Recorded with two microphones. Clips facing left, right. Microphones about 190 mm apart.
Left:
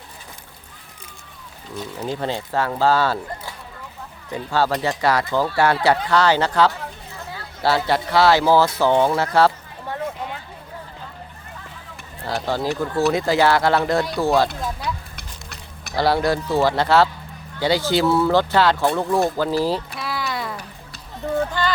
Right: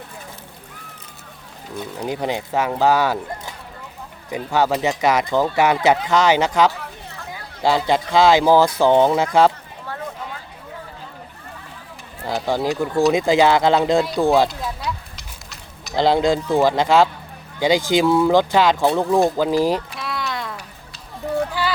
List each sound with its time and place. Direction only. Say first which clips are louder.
2.0 s speech: right 2 dB; 15° right (ahead or behind)
12.2 s speech: right 2 dB; 15° right (ahead or behind)
16.0 s speech: right 2 dB; 20° right (ahead or behind)
20.0 s a sound: even; centre (ahead or behind)
21.6 s music: even; 10° right (ahead or behind)